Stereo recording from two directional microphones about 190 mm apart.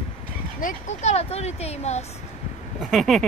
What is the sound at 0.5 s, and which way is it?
Speech, 40° left (ahead or behind).